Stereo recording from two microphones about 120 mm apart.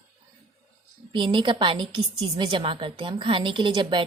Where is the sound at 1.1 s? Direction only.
45° right (ahead or behind).